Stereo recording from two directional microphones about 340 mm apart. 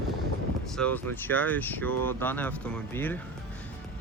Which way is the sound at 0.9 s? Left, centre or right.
Centre.